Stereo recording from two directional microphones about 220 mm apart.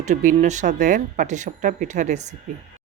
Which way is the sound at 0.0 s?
35° right (ahead or behind).